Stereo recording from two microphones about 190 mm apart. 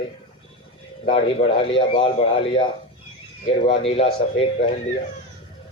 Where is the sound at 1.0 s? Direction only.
35° left (ahead or behind).